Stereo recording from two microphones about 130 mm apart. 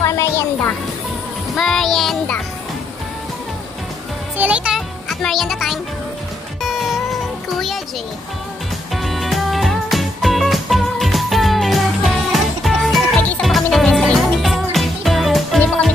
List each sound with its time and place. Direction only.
0.0 s music: 25° left (ahead or behind)
1.5 s child singing: centre (ahead or behind)
4.4 s music: 10° right (ahead or behind)
5.2 s speech: centre (ahead or behind)
6.6 s music: centre (ahead or behind)
8.9 s music: centre (ahead or behind)